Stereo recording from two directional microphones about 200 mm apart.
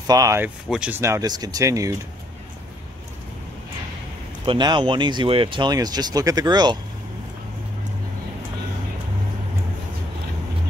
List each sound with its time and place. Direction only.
0.0 s speech: 15° right (ahead or behind)
4.5 s speech: 20° right (ahead or behind)